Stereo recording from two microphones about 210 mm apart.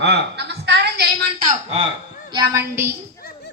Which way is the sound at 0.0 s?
55° right (ahead or behind).